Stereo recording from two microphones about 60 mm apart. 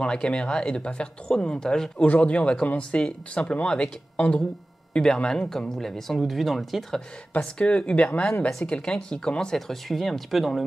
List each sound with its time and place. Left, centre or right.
0.0 s speech: centre
7.5 s speech: centre
8.5 s speech: centre